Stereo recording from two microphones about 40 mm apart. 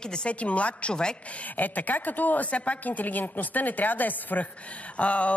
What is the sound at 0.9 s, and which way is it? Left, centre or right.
Speech, left.